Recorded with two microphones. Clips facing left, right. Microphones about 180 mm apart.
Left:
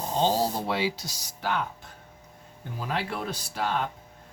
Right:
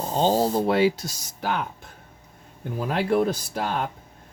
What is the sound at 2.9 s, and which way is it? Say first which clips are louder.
Speech: right 10 dB; 45° right (ahead or behind).